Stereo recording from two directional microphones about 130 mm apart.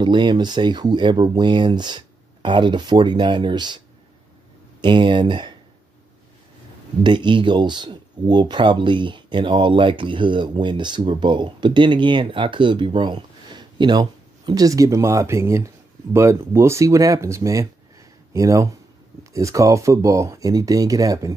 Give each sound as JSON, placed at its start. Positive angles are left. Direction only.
{"t": 0.0, "sound": "speech", "side_deg": -35}
{"t": 4.8, "sound": "speech", "side_deg": -40}
{"t": 7.0, "sound": "speech", "side_deg": -35}